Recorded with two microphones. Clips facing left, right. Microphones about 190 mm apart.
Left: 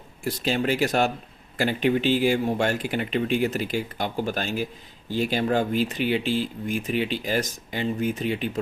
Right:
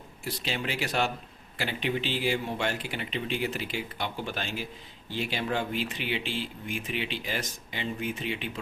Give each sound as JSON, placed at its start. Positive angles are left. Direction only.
{"t": 0.3, "sound": "speech", "side_deg": 45}